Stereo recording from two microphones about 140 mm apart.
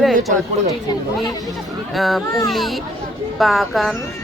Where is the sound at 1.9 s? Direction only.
Centre (ahead or behind).